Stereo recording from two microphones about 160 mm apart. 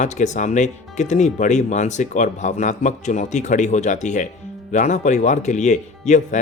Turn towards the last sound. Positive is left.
turn(degrees=50)  # may be behind; listen again after turning